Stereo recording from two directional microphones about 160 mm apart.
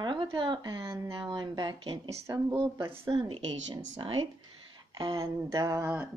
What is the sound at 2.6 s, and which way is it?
Speech, 35° right (ahead or behind).